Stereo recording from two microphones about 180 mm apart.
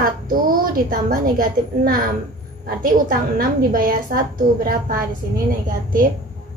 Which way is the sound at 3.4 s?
50° right (ahead or behind).